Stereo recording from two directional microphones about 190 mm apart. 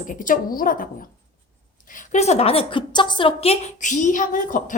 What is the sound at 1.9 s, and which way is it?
A woman's voice, 40° left (ahead or behind).